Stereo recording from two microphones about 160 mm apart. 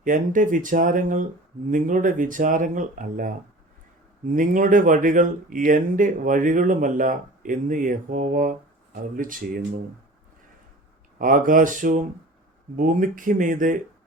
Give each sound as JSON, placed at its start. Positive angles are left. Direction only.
{"t": 0.0, "sound": "speech", "side_deg": -55}
{"t": 4.4, "sound": "speech", "side_deg": -55}
{"t": 11.2, "sound": "speech", "side_deg": -55}